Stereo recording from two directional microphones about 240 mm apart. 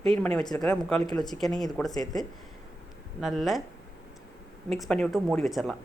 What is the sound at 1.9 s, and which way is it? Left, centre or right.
Speech, centre.